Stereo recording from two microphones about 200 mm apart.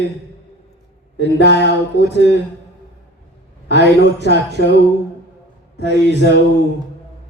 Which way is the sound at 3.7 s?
60° left (ahead or behind).